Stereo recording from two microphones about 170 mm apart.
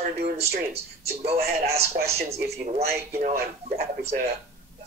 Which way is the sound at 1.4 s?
65° right (ahead or behind).